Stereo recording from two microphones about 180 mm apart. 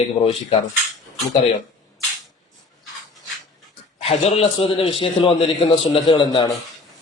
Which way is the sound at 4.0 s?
35° left (ahead or behind).